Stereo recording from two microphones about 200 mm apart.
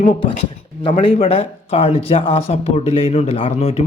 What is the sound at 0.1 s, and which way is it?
Speech, 25° left (ahead or behind).